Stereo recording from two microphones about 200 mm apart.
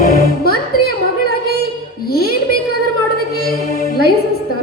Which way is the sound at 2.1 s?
50° left (ahead or behind).